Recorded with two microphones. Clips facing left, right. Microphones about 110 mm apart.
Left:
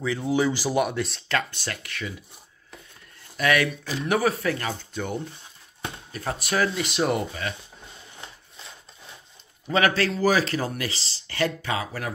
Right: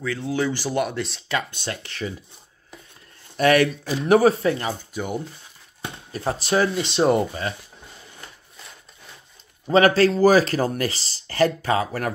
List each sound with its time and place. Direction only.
0.0 s speech: 15° left (ahead or behind); by 1.4 s centre (ahead or behind)
1.5 s speech: 25° right (ahead or behind)
3.3 s speech: 35° right (ahead or behind); by 5.2 s 10° right (ahead or behind)
6.1 s speech: 30° right (ahead or behind)
9.7 s speech: 35° right (ahead or behind)